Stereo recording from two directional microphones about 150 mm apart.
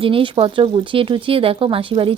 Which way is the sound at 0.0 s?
35° right (ahead or behind).